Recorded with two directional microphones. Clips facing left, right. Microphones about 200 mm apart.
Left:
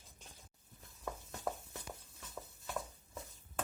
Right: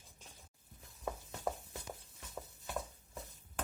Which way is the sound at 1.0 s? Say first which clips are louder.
Right 2 dB; 10° right (ahead or behind).